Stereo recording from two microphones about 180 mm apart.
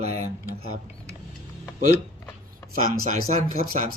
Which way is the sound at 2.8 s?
50° right (ahead or behind).